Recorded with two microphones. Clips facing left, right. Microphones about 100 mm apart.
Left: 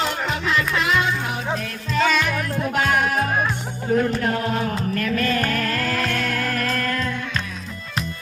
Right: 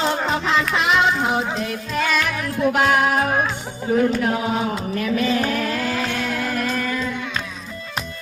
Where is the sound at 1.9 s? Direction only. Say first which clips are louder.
Left 3 dB; centre (ahead or behind).